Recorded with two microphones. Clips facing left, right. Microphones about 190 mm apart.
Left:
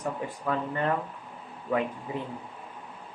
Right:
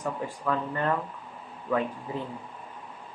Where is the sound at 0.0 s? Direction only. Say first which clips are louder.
Right 1 dB; 20° left (ahead or behind).